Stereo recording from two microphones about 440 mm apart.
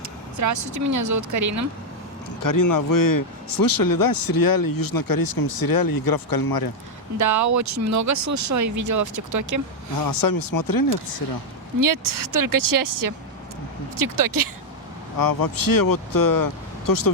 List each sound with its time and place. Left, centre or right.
0.3 s speech: right
2.4 s speech: left
7.2 s speech: right
10.0 s speech: left
11.8 s speech: right
15.2 s speech: left